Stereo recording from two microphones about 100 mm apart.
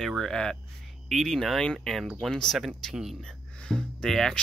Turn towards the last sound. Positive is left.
turn(degrees=5)  # may be behind; listen again after turning